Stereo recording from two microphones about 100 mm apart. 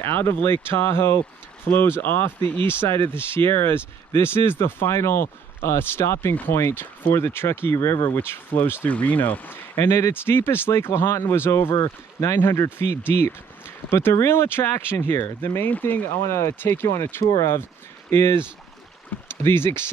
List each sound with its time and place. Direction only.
0.0 s speech: 20° left (ahead or behind)
11.7 s speech: 40° left (ahead or behind)
12.4 s speech: 25° left (ahead or behind)
19.4 s speech: 25° left (ahead or behind)